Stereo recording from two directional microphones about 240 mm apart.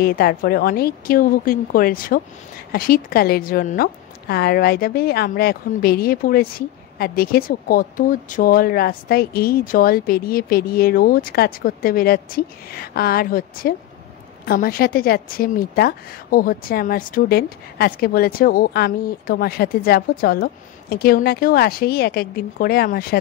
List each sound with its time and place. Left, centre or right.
0.0 s a woman's voice: left